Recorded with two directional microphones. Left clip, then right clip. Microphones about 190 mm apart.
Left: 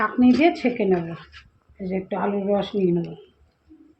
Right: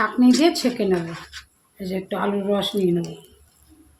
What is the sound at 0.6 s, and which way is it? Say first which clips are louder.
Speech: even; 30° right (ahead or behind).